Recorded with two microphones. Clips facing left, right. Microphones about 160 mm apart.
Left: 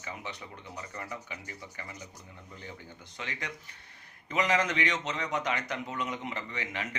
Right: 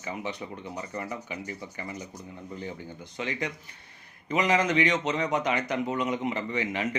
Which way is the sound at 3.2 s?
10° right (ahead or behind).